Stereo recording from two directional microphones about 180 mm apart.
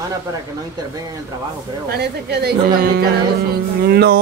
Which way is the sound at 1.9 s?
65° right (ahead or behind).